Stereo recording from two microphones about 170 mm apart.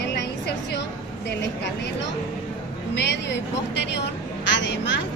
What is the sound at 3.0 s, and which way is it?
A woman's voice, 90° left.